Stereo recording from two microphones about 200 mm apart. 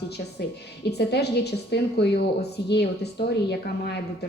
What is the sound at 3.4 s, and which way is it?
Speech, 55° left (ahead or behind).